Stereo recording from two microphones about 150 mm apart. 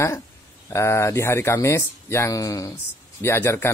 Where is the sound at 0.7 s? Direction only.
20° left (ahead or behind).